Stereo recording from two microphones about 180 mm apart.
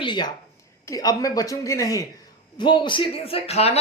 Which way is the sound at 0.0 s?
25° left (ahead or behind).